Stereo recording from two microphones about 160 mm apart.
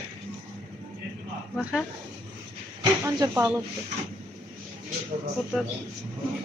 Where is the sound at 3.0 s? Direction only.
20° right (ahead or behind).